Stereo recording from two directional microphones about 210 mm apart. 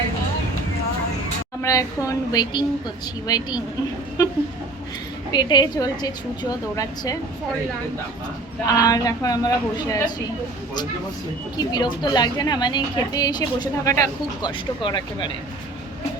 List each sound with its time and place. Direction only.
1.6 s a woman's voice: 15° left (ahead or behind)
5.3 s a woman's voice: 20° left (ahead or behind)
8.6 s speech: 20° left (ahead or behind)
11.5 s a woman's voice: 20° left (ahead or behind)